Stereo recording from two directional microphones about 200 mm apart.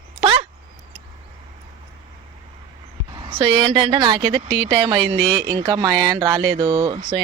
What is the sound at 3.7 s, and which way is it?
Speech, 25° right (ahead or behind).